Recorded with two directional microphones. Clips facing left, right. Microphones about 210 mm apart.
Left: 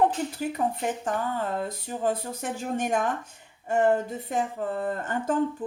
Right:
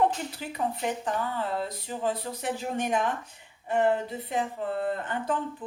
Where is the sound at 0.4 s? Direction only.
45° left (ahead or behind).